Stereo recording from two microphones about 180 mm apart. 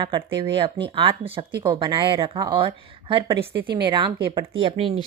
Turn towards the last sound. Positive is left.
turn(degrees=-30)  # may be behind; listen again after turning